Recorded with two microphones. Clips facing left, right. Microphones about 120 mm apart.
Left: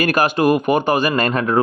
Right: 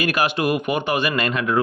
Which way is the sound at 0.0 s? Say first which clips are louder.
Left 5 dB; 45° left (ahead or behind).